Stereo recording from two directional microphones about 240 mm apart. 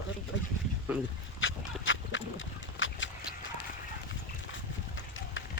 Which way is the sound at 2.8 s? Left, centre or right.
Left.